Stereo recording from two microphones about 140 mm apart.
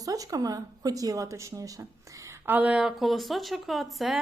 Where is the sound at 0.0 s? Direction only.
25° right (ahead or behind).